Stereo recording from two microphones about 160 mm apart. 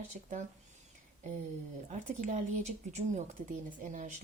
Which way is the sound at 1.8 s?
50° right (ahead or behind).